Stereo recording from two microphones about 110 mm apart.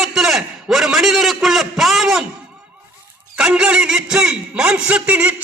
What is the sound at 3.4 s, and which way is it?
A man's voice, 5° right (ahead or behind).